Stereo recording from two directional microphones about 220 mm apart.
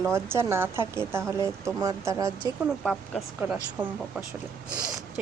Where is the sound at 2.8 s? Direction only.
Centre (ahead or behind).